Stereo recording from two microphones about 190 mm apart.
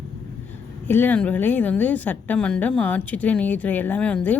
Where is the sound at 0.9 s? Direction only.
10° left (ahead or behind).